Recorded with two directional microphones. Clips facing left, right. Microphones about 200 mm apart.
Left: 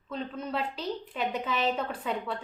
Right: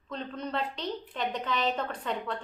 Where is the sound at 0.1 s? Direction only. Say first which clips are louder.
Left 1 dB; 5° left (ahead or behind).